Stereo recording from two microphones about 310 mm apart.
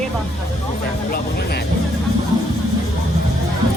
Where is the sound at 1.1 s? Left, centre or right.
Left.